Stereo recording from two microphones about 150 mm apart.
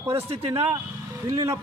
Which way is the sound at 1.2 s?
20° right (ahead or behind).